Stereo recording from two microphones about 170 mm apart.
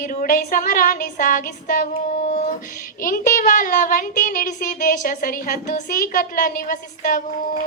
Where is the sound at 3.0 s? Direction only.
55° left (ahead or behind).